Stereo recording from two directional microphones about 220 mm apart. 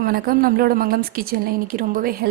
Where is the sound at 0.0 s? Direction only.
40° right (ahead or behind).